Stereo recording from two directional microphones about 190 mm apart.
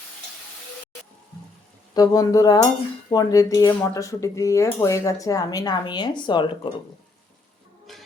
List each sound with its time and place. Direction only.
1.9 s cutlery: 20° left (ahead or behind)
3.1 s speech: 20° left (ahead or behind)
7.9 s a sound: centre (ahead or behind)